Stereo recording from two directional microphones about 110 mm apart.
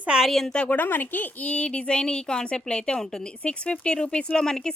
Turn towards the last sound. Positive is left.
turn(degrees=5)  # may be behind; listen again after turning